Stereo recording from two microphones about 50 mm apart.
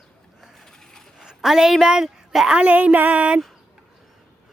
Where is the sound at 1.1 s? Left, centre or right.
Centre.